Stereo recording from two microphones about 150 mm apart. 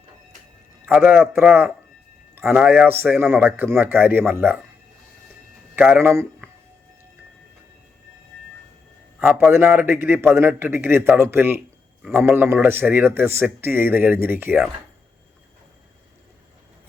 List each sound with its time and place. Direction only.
0.9 s speech: 15° right (ahead or behind)
5.7 s speech: 15° right (ahead or behind)
9.1 s a sound: 15° right (ahead or behind)
9.5 s speech: 15° right (ahead or behind)